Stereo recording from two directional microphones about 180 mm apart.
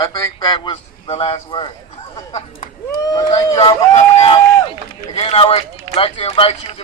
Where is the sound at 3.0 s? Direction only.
20° left (ahead or behind).